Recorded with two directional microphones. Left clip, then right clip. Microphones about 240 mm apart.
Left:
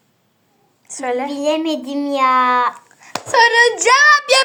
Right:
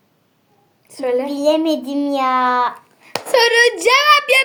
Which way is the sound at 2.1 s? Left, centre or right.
Centre.